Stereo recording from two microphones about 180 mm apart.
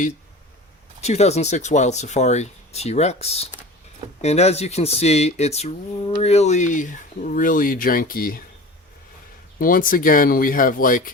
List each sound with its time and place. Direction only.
1.0 s speech: 35° left (ahead or behind); by 8.4 s 55° left (ahead or behind)
9.6 s speech: 50° left (ahead or behind)